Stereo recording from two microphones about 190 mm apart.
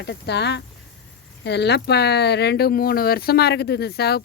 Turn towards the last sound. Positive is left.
turn(degrees=55)  # may be behind; listen again after turning